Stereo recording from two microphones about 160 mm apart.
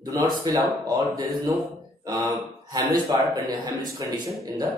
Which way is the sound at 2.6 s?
25° right (ahead or behind).